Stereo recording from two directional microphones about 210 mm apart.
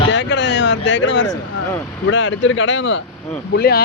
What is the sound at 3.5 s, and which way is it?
Speech, 50° left (ahead or behind).